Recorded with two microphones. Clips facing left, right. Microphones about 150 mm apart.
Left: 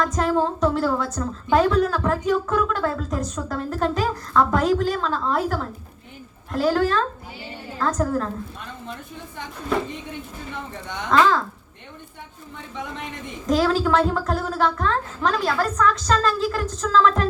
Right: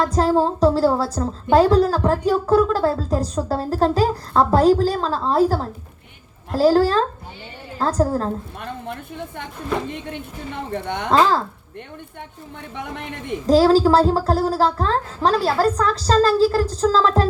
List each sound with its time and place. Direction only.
0.0 s a woman's voice: 30° right (ahead or behind)
10.7 s a woman's voice: 60° right (ahead or behind)
11.1 s a woman's voice: 35° right (ahead or behind)
13.5 s a woman's voice: 35° right (ahead or behind)